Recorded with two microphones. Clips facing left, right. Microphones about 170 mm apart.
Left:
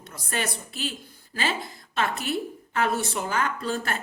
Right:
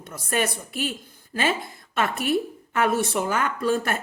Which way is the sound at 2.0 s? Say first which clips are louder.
Right 4 dB; 55° right (ahead or behind).